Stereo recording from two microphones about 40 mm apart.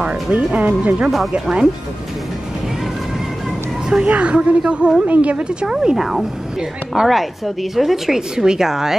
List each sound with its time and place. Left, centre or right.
0.3 s a woman's voice: right
4.0 s a woman's voice: right
5.0 s a woman's voice: right
5.7 s a woman's voice: centre
5.9 s a woman's voice: centre